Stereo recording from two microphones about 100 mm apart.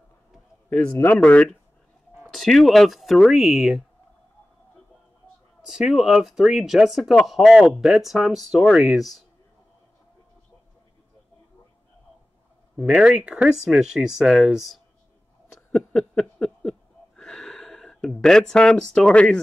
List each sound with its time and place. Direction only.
0.7 s speech: 15° left (ahead or behind)
2.2 s speech: centre (ahead or behind)
5.7 s speech: 5° right (ahead or behind)
12.7 s speech: 10° right (ahead or behind)
15.7 s a sound: 10° left (ahead or behind)